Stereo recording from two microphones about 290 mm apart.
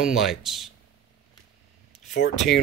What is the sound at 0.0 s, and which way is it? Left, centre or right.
Speech, centre.